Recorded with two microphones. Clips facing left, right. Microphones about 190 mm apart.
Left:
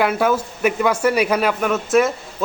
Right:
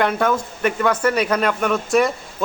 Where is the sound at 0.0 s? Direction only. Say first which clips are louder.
Left 1 dB; 5° left (ahead or behind).